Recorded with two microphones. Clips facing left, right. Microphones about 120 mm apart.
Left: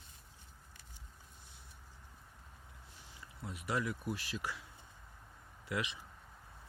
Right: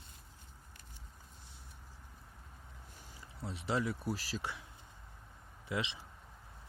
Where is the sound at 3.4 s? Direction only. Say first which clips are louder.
Right 2 dB; 30° right (ahead or behind).